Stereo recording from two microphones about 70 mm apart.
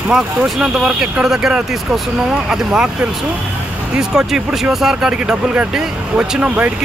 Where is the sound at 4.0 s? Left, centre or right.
Centre.